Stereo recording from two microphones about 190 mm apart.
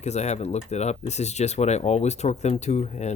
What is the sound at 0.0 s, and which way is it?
Speech, 35° left (ahead or behind).